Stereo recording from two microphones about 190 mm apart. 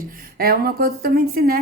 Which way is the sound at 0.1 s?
50° right (ahead or behind).